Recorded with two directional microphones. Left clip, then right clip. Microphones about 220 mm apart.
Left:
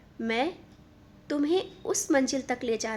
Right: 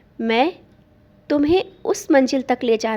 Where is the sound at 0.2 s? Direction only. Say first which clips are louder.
Right 10 dB; 35° right (ahead or behind).